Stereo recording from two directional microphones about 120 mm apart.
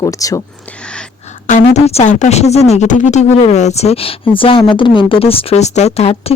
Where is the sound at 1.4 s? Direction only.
80° left.